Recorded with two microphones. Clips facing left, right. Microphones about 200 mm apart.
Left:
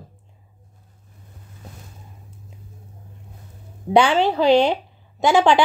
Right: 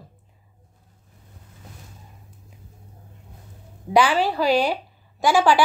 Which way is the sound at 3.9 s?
25° left (ahead or behind).